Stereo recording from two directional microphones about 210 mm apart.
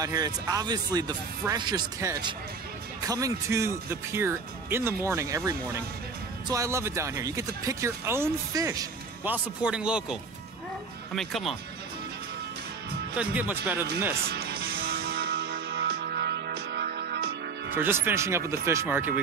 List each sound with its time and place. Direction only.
0.0 s speech: 20° right (ahead or behind)
11.1 s speech: centre (ahead or behind)
13.2 s speech: 5° right (ahead or behind)
14.3 s music: 50° right (ahead or behind)
17.7 s speech: 10° right (ahead or behind)